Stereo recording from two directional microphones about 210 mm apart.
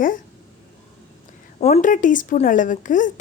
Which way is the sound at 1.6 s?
35° left (ahead or behind).